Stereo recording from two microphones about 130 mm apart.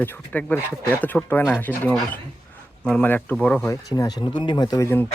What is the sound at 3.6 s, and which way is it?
Speech, 25° left (ahead or behind).